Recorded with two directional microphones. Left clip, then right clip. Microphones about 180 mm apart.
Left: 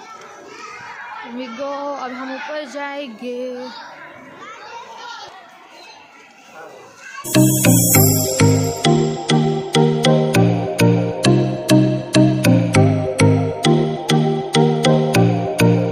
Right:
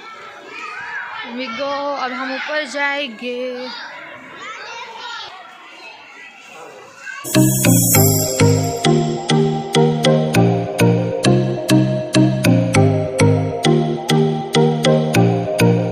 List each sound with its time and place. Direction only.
1.4 s a man's voice: 5° left (ahead or behind)
7.5 s music: centre (ahead or behind)